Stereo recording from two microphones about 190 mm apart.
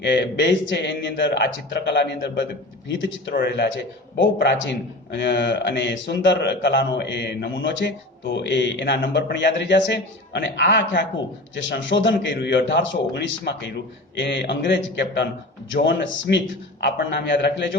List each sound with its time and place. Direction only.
0.0 s a man's voice: 65° left (ahead or behind)
3.3 s a man's voice: 60° left (ahead or behind)